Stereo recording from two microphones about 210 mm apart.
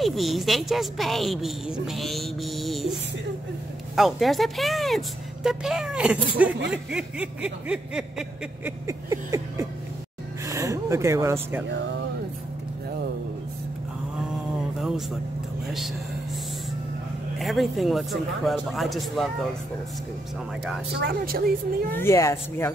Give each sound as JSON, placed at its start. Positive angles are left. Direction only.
{"t": 0.0, "sound": "a sound", "side_deg": 0}
{"t": 10.4, "sound": "gasp", "side_deg": -15}
{"t": 11.7, "sound": "speech", "side_deg": -55}
{"t": 14.8, "sound": "music", "side_deg": 0}
{"t": 17.4, "sound": "a sound", "side_deg": 0}
{"t": 21.0, "sound": "a woman's voice", "side_deg": -45}
{"t": 21.9, "sound": "speech", "side_deg": 15}